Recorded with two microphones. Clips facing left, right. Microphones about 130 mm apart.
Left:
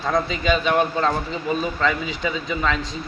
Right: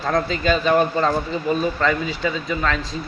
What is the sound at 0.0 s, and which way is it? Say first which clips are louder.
A man's voice: right 1 dB; centre (ahead or behind).